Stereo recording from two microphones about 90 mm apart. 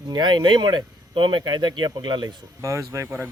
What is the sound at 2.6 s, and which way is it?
Speech, 35° right (ahead or behind).